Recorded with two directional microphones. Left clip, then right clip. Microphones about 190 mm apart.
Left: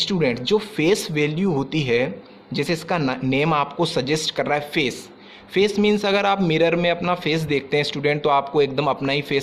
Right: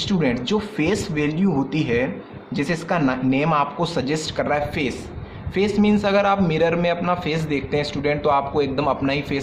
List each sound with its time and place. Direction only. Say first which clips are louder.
0.0 s a man's voice: left 1 dB; 40° left (ahead or behind)